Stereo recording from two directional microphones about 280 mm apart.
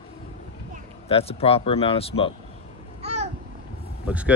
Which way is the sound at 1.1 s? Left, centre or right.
Left.